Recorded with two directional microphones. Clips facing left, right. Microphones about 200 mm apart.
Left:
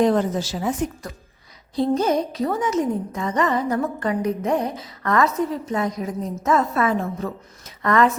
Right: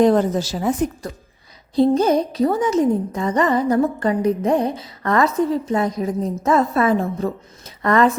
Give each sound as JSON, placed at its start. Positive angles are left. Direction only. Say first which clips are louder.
{"t": 0.0, "sound": "a woman's voice", "louder": "right 4 dB", "side_deg": -40}
{"t": 1.7, "sound": "a woman's voice", "louder": "right 4 dB", "side_deg": -30}